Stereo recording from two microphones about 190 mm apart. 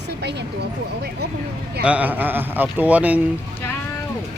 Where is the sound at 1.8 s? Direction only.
5° right (ahead or behind).